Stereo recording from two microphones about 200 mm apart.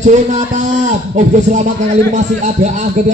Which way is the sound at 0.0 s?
40° right (ahead or behind).